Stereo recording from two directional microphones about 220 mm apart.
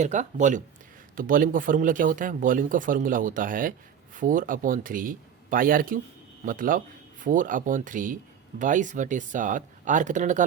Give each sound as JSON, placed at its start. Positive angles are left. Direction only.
{"t": 0.0, "sound": "speech", "side_deg": -35}